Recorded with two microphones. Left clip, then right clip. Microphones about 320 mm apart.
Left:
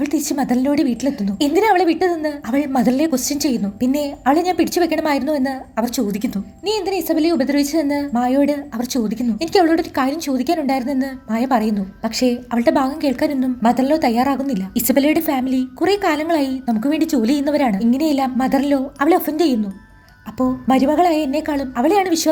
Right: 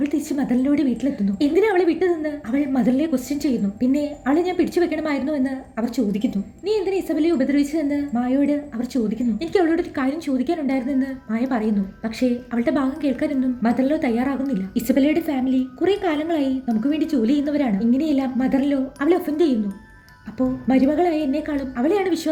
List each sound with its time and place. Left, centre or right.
0.0 s a woman's voice: centre
20.7 s a woman's voice: left